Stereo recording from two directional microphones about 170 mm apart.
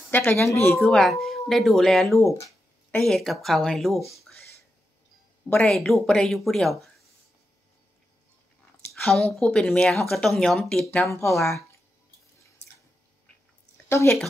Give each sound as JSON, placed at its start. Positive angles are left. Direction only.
{"t": 0.1, "sound": "speech", "side_deg": 15}
{"t": 0.7, "sound": "speech", "side_deg": 0}
{"t": 2.1, "sound": "a sound", "side_deg": 15}
{"t": 3.0, "sound": "speech", "side_deg": 0}
{"t": 5.5, "sound": "speech", "side_deg": 5}
{"t": 9.0, "sound": "speech", "side_deg": 0}
{"t": 11.3, "sound": "speech", "side_deg": 0}
{"t": 13.8, "sound": "speech", "side_deg": 15}